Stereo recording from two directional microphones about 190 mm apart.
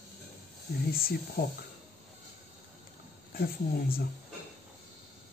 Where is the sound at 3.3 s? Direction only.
50° left (ahead or behind).